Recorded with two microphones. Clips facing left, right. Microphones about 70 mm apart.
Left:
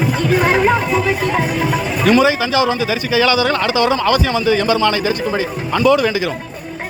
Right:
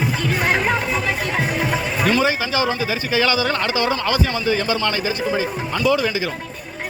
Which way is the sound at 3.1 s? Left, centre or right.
Left.